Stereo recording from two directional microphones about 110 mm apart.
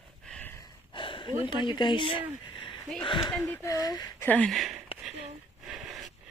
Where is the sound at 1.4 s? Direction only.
45° left (ahead or behind).